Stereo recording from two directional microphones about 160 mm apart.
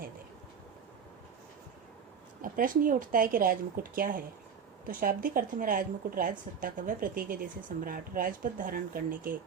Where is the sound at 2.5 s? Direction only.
60° right (ahead or behind).